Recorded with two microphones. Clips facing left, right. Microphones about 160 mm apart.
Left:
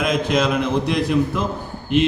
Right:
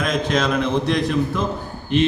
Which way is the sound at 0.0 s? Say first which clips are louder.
Left 1 dB; 5° left (ahead or behind).